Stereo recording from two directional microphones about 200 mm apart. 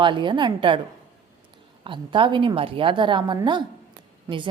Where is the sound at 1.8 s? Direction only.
25° right (ahead or behind).